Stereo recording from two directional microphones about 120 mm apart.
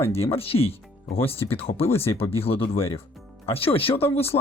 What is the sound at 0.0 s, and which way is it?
Speech, 55° left (ahead or behind).